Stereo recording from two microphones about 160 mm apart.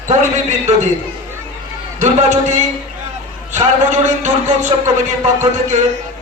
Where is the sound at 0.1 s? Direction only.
45° right (ahead or behind).